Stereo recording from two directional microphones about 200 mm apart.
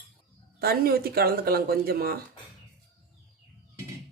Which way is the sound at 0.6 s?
50° right (ahead or behind).